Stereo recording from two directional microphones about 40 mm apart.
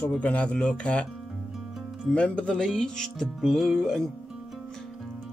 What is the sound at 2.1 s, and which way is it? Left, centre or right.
Speech, left.